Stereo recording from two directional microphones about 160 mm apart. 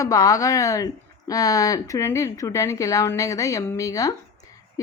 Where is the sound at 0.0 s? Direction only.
20° left (ahead or behind).